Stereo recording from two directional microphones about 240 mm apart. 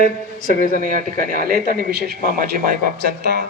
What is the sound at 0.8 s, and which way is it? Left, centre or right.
A man's voice, right.